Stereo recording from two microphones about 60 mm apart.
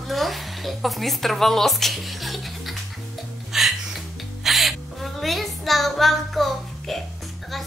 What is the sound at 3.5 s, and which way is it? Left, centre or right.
Music, centre.